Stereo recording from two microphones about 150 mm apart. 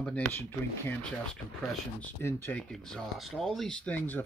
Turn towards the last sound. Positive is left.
turn(degrees=10)  # may be behind; listen again after turning